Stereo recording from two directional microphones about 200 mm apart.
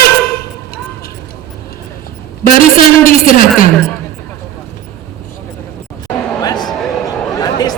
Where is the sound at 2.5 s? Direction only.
45° left (ahead or behind).